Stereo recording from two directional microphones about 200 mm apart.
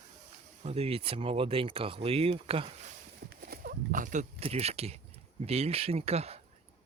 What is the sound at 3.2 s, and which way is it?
Speech, 50° right (ahead or behind).